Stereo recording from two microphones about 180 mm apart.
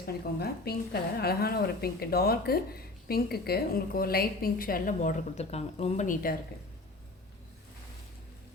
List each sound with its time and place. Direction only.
0.0 s a woman's voice: 60° left (ahead or behind); by 6.3 s 45° left (ahead or behind)